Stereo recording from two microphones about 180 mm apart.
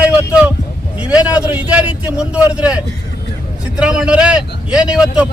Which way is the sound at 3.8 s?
5° right (ahead or behind).